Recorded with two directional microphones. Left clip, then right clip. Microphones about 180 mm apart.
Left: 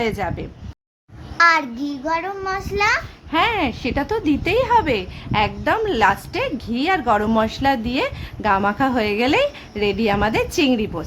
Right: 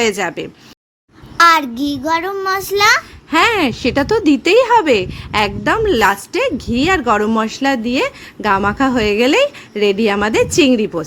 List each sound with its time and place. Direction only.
0.0 s child singing: 20° right (ahead or behind)
1.4 s child singing: 30° right (ahead or behind)